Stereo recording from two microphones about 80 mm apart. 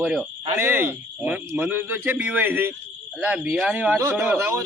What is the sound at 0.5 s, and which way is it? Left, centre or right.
A man's voice, right.